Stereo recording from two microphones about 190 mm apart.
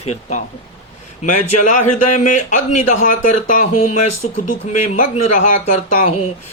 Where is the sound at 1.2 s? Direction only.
40° left (ahead or behind).